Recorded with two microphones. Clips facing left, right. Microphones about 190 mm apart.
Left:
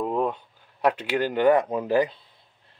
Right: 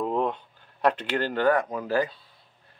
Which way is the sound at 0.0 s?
5° left (ahead or behind).